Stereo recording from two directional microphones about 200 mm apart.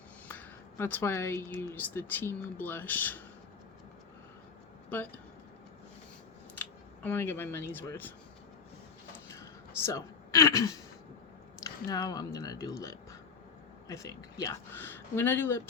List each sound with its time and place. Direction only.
0.3 s speech: 10° left (ahead or behind)
4.9 s speech: 10° left (ahead or behind)
7.0 s speech: 10° left (ahead or behind)
9.8 s a man's voice: 15° left (ahead or behind)
11.9 s speech: 20° left (ahead or behind)